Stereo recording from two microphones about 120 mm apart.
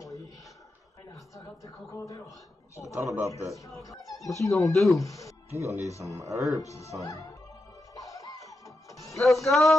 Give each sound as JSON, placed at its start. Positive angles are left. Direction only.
{"t": 0.0, "sound": "a sound", "side_deg": 25}
{"t": 1.3, "sound": "a sound", "side_deg": 25}
{"t": 2.7, "sound": "speech", "side_deg": 25}
{"t": 3.0, "sound": "speech", "side_deg": -20}
{"t": 3.8, "sound": "speech", "side_deg": 30}
{"t": 4.7, "sound": "music", "side_deg": 0}
{"t": 5.0, "sound": "speech", "side_deg": 25}
{"t": 5.5, "sound": "speech", "side_deg": -25}
{"t": 5.8, "sound": "speech", "side_deg": 25}
{"t": 6.0, "sound": "speech", "side_deg": -25}
{"t": 6.6, "sound": "speech", "side_deg": 25}
{"t": 7.9, "sound": "music", "side_deg": 30}
{"t": 9.1, "sound": "music", "side_deg": 0}